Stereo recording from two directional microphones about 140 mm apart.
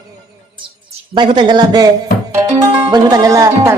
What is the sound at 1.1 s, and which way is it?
Speech, 35° right (ahead or behind).